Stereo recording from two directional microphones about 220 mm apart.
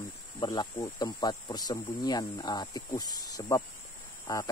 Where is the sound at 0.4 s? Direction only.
15° left (ahead or behind).